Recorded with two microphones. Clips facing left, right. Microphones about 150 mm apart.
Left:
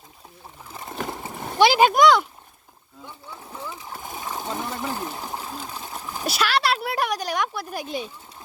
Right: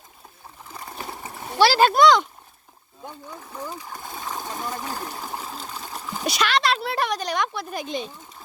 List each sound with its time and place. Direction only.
1.5 s speech: 15° left (ahead or behind)
3.8 s speech: 15° left (ahead or behind)
5.4 s sewing machine: 15° left (ahead or behind)
5.9 s speech: 5° left (ahead or behind)